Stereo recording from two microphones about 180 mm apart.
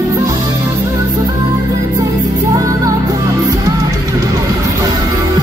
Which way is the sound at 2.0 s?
20° right (ahead or behind).